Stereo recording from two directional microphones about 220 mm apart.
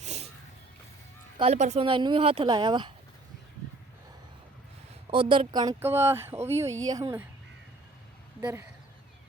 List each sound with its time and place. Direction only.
0.0 s a sound: 30° right (ahead or behind)
1.4 s speech: 30° right (ahead or behind)
5.1 s speech: 25° right (ahead or behind)
8.4 s speech: 10° right (ahead or behind)